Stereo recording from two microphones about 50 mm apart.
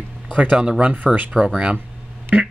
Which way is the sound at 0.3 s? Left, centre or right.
Right.